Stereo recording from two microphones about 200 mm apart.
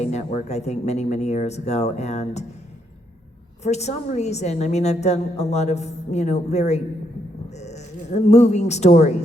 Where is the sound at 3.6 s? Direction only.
35° left (ahead or behind).